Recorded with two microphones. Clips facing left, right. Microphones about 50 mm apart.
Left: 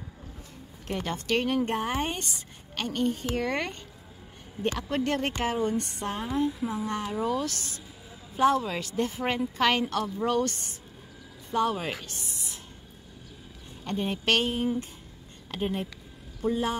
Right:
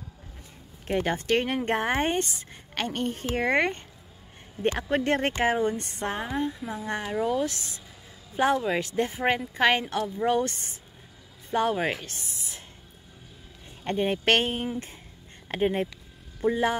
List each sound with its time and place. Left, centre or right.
0.8 s a woman's voice: right
6.2 s speech: centre
6.6 s speech: centre
6.9 s speech: right
8.6 s speech: right
11.5 s a woman's voice: right
13.8 s a woman's voice: right